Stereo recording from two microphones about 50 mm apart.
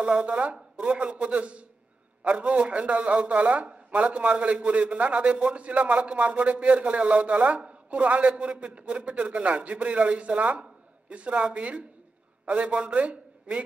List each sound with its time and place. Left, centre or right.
0.0 s a man's voice: right